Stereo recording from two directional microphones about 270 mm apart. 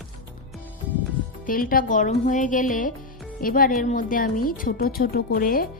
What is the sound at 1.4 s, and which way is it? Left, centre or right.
A woman's voice, left.